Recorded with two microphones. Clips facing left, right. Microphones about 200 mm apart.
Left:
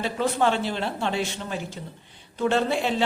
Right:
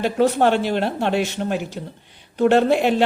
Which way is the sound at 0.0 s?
65° right (ahead or behind).